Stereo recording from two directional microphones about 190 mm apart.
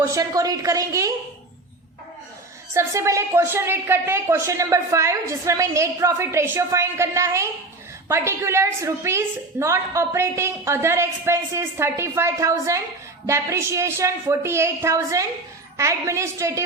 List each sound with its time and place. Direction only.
0.0 s a woman's voice: 15° right (ahead or behind)
2.7 s a woman's voice: 15° right (ahead or behind)